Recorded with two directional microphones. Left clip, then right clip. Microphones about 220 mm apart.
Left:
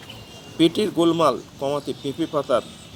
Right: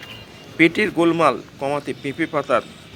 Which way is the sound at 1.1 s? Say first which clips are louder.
Right 2 dB; 30° right (ahead or behind).